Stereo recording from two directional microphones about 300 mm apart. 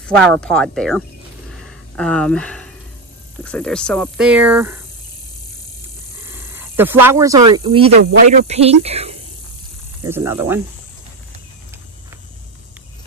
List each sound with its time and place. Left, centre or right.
0.0 s speech: centre
1.5 s a sound: centre
3.4 s speech: centre
6.2 s speech: centre
10.0 s speech: centre